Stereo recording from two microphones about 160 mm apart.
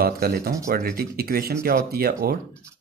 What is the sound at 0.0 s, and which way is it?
Speech, 70° right (ahead or behind).